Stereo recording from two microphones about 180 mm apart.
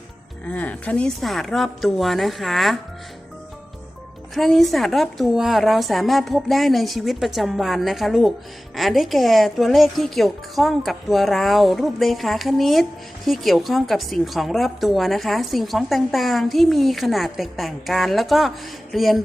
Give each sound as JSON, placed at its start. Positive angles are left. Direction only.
{"t": 0.4, "sound": "a woman's voice", "side_deg": 10}
{"t": 4.4, "sound": "a woman's voice", "side_deg": 0}